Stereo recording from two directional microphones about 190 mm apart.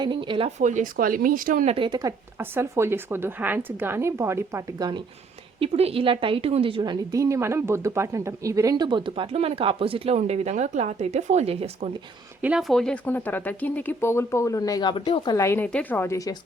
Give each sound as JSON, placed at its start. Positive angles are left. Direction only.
{"t": 0.0, "sound": "a woman's voice", "side_deg": -25}
{"t": 0.6, "sound": "speech", "side_deg": -40}
{"t": 1.7, "sound": "speech", "side_deg": -25}
{"t": 5.5, "sound": "a woman's voice", "side_deg": -30}
{"t": 12.4, "sound": "speech", "side_deg": -5}